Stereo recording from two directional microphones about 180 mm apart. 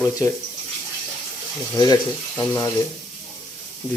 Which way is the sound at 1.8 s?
20° left (ahead or behind).